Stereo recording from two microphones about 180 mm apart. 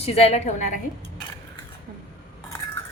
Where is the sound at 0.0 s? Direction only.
35° left (ahead or behind).